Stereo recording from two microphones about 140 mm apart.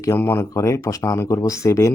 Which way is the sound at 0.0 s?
15° left (ahead or behind).